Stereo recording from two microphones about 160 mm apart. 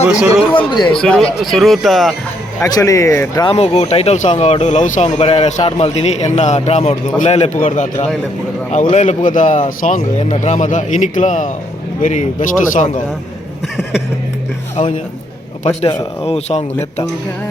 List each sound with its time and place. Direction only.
0.1 s speech: 5° right (ahead or behind)
2.6 s speech: 20° left (ahead or behind)
3.5 s a man's voice: 40° left (ahead or behind)
5.1 s a man's voice: 35° left (ahead or behind); by 13.0 s 50° left (ahead or behind)
16.2 s speech: 40° left (ahead or behind)